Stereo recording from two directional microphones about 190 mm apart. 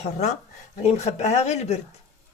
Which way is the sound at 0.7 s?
35° left (ahead or behind).